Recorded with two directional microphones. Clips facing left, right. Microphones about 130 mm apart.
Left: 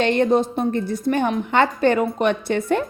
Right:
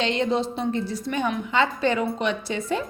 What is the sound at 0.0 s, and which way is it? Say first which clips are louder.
A woman's voice: left 6 dB; 55° left (ahead or behind).